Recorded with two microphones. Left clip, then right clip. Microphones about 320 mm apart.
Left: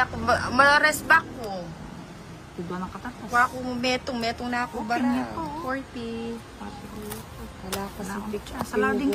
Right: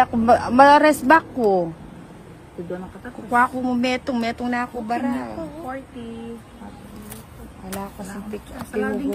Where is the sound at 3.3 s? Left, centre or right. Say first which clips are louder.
Right 4 dB; right.